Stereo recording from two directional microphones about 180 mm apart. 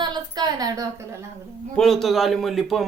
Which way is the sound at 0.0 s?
25° right (ahead or behind).